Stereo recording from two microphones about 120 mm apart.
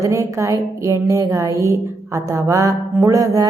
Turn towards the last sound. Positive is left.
turn(degrees=-25)  # may be behind; listen again after turning